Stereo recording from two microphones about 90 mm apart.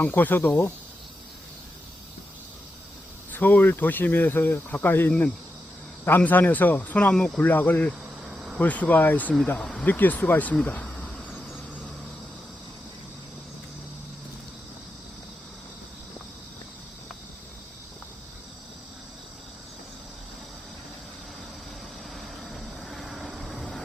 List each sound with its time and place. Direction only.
0.0 s speech: 20° left (ahead or behind)
3.3 s speech: 20° left (ahead or behind)
8.2 s cricket: 10° right (ahead or behind)
8.5 s speech: 15° left (ahead or behind)
22.1 s vehicle: centre (ahead or behind)